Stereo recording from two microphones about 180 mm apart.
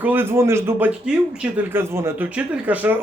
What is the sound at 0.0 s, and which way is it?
Speech, 10° right (ahead or behind).